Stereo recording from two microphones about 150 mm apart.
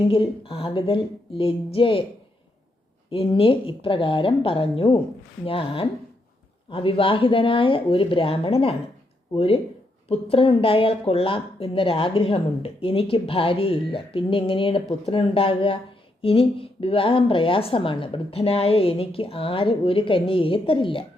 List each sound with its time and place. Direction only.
0.1 s a woman's voice: 35° left (ahead or behind)
3.1 s a woman's voice: 35° left (ahead or behind)